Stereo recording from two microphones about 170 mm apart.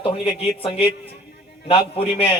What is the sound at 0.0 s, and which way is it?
A man's voice, 30° left (ahead or behind).